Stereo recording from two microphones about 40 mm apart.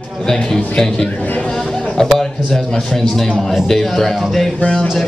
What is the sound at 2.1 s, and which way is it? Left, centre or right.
A man's voice, centre.